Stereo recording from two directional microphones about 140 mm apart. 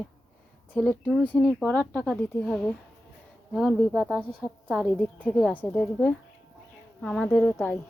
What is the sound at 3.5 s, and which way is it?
A woman's voice, 5° left (ahead or behind).